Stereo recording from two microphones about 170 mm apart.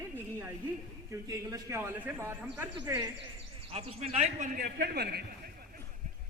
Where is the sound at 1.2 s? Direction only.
20° right (ahead or behind).